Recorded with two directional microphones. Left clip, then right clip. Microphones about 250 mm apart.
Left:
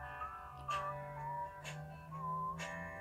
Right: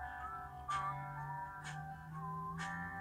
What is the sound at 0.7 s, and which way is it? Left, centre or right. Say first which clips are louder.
Music: even; centre.